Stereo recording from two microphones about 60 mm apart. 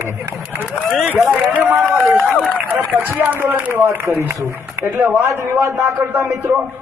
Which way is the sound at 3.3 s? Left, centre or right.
Right.